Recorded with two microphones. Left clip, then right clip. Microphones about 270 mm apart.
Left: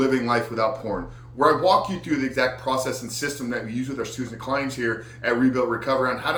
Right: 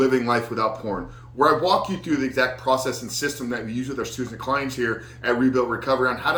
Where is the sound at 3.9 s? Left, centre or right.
Centre.